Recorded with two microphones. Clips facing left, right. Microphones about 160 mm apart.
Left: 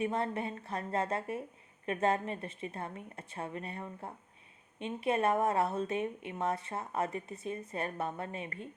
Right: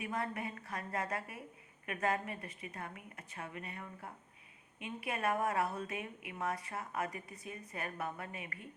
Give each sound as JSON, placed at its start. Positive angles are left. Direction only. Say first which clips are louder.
{"t": 0.0, "sound": "speech", "louder": "left 6 dB", "side_deg": 30}